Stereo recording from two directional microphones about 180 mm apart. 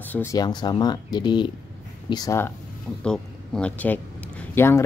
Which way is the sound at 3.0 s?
5° left (ahead or behind).